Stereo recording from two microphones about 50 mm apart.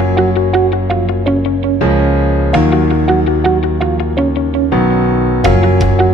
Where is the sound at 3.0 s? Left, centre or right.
Centre.